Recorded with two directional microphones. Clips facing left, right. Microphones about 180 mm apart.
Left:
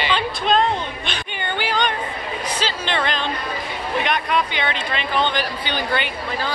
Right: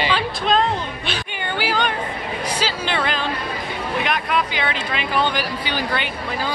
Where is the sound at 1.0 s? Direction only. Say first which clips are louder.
Right 1 dB; 5° right (ahead or behind).